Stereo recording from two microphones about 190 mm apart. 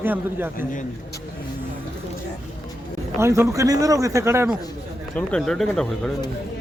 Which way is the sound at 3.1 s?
15° right (ahead or behind).